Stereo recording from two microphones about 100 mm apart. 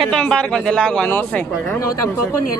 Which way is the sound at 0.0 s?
5° left (ahead or behind).